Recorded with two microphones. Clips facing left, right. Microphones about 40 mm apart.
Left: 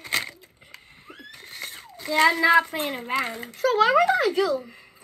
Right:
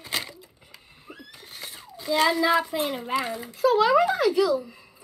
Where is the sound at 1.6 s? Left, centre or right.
Left.